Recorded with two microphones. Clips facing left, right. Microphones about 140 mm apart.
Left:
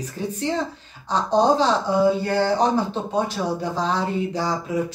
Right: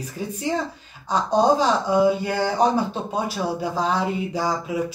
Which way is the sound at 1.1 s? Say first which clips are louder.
Even; 10° right (ahead or behind).